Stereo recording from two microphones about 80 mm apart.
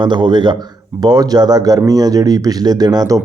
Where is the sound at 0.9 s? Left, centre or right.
Right.